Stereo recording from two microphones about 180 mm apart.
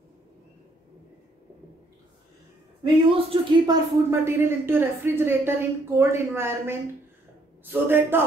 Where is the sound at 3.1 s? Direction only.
30° right (ahead or behind).